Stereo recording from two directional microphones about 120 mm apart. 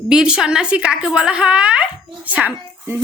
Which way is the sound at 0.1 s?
5° right (ahead or behind).